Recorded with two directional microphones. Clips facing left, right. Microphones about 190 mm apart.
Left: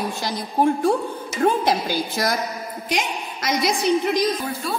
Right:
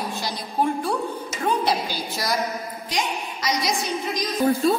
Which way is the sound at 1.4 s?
50° left (ahead or behind).